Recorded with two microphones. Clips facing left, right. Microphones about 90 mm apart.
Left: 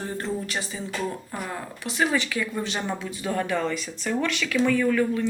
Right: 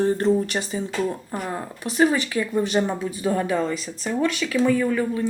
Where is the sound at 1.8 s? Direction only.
35° right (ahead or behind).